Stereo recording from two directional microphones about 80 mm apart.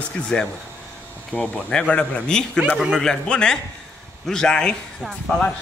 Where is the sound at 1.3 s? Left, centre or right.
Centre.